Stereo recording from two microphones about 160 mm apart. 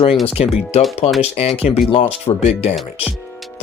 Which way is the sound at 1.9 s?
40° left (ahead or behind).